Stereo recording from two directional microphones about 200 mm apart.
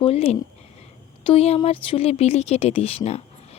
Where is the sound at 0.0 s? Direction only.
30° left (ahead or behind).